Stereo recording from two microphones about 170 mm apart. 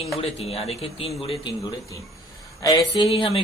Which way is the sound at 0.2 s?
35° left (ahead or behind).